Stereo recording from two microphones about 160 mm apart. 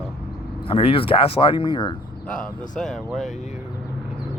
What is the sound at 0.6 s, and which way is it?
Speech, 35° left (ahead or behind).